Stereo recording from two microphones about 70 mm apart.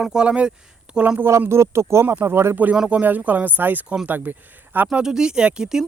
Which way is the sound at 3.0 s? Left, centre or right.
Right.